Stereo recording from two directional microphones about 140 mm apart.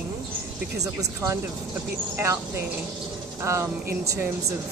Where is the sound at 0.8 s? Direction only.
25° right (ahead or behind).